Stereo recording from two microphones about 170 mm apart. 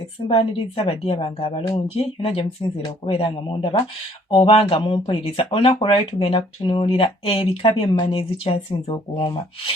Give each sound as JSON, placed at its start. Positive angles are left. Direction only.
{"t": 0.3, "sound": "speech", "side_deg": 35}